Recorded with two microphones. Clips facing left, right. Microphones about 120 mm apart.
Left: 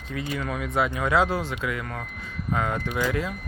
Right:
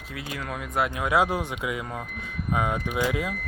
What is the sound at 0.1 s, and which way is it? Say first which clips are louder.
Speech: left 4 dB; 5° right (ahead or behind).